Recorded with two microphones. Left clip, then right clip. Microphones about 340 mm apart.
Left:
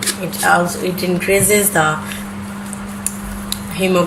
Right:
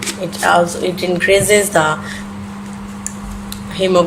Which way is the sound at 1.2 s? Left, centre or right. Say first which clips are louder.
Right 3 dB; right.